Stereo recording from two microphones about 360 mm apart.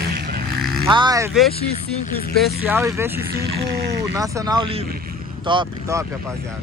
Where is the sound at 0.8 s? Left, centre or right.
Centre.